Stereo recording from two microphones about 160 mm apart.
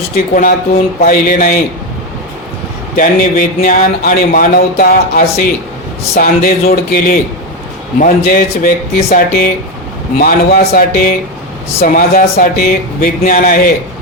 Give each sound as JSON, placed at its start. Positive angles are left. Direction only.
{"t": 0.3, "sound": "speech", "side_deg": 60}
{"t": 2.9, "sound": "speech", "side_deg": 60}